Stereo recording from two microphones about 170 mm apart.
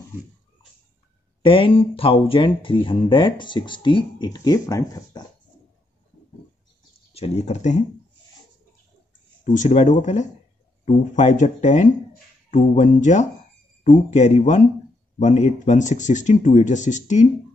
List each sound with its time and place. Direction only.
1.4 s speech: 30° left (ahead or behind)
7.2 s speech: 40° left (ahead or behind)
9.4 s speech: 45° left (ahead or behind)